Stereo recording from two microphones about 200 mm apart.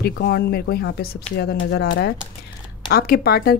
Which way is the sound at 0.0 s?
50° left (ahead or behind).